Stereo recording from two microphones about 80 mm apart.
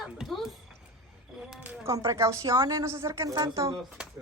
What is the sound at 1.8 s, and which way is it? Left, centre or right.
A woman's voice, right.